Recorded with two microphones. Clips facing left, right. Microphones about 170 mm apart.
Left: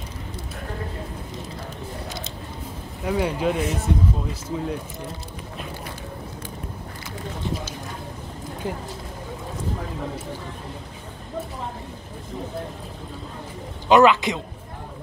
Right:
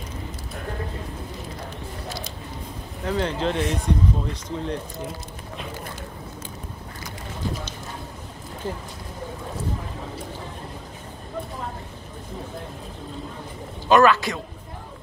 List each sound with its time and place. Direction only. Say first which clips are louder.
2.0 s a sound: right 1 dB; 20° left (ahead or behind)
3.1 s speech: left 2 dB; 10° left (ahead or behind)
8.6 s speech: left 1 dB; 15° left (ahead or behind)
13.8 s a man's voice: left 1 dB; 20° left (ahead or behind)